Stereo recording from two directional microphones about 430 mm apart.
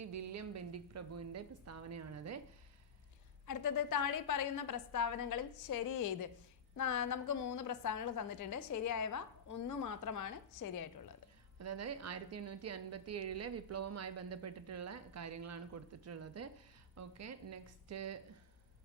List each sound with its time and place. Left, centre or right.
0.1 s a woman's voice: right
3.4 s a woman's voice: left
11.6 s a woman's voice: right